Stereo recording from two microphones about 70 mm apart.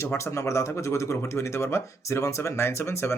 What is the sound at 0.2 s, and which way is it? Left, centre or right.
Speech, left.